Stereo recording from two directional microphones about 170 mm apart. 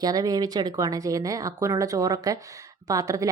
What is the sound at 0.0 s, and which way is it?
A woman's voice, 20° right (ahead or behind).